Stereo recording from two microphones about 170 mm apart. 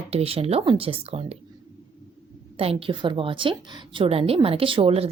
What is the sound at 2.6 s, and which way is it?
A woman's voice, 35° right (ahead or behind).